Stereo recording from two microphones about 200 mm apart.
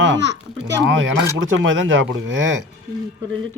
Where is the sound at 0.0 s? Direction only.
65° right (ahead or behind).